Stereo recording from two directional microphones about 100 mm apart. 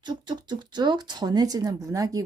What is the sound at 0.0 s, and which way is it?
Speech, 45° right (ahead or behind).